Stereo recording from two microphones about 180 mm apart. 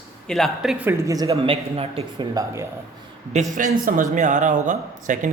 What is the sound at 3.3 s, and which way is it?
Speech, 45° right (ahead or behind).